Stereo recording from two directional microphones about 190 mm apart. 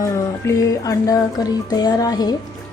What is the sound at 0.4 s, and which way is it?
Music, 20° left (ahead or behind).